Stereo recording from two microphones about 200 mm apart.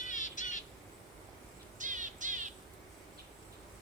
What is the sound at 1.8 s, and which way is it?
Crow, 40° right (ahead or behind).